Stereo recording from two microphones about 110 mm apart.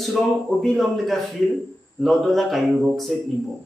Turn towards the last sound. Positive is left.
turn(degrees=0)  # may be behind; listen again after turning